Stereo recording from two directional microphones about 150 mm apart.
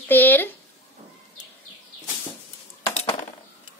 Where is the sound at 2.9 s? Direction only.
45° left (ahead or behind).